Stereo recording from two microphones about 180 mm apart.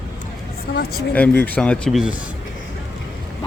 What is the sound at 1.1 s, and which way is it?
Speech, 10° left (ahead or behind).